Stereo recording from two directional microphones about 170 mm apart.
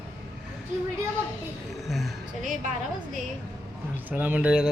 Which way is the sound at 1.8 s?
Centre (ahead or behind).